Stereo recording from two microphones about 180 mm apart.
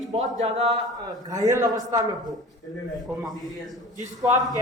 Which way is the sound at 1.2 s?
20° right (ahead or behind).